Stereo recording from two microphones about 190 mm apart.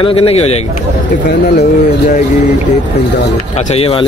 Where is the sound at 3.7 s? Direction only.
30° left (ahead or behind).